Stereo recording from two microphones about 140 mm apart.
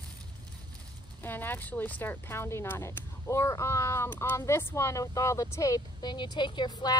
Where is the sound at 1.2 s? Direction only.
15° left (ahead or behind).